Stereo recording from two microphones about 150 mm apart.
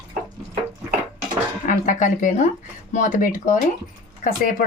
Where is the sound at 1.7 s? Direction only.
60° left (ahead or behind).